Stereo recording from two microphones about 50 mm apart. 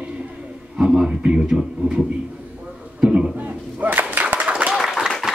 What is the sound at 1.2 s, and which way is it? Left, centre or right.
Speech, centre.